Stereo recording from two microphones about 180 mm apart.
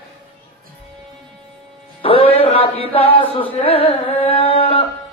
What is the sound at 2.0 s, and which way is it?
Music, 30° left (ahead or behind).